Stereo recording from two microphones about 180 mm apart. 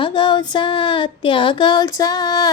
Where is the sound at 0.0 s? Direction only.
25° left (ahead or behind).